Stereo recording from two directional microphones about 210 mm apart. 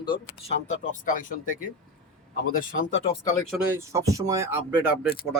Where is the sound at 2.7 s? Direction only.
45° left (ahead or behind).